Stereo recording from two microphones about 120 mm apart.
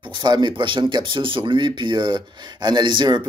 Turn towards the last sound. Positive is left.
turn(degrees=-40)  # may be behind; listen again after turning